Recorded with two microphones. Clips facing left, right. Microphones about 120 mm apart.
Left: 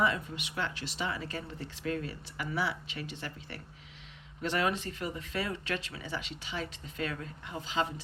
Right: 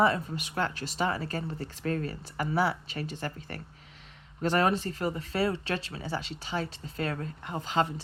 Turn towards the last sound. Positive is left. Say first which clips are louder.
# right 5 dB
turn(degrees=-50)  # may be behind; listen again after turning